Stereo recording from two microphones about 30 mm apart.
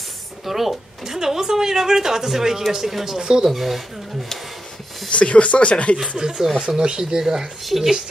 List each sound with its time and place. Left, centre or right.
0.5 s a woman's voice: centre
3.2 s speech: right
3.4 s speech: centre
5.1 s speech: left
6.1 s speech: right
7.6 s speech: centre